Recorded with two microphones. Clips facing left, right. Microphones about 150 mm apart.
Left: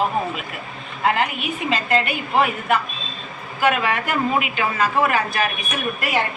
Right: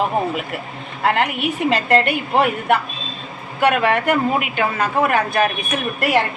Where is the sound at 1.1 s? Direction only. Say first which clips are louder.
Right 3 dB; 70° right (ahead or behind).